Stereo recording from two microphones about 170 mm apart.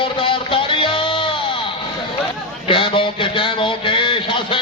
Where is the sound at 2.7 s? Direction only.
30° left (ahead or behind).